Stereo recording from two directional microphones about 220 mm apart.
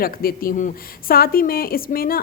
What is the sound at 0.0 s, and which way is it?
A woman's voice, 40° left (ahead or behind).